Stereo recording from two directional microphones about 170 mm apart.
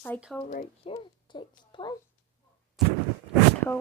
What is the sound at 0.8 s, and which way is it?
Speech, 30° left (ahead or behind).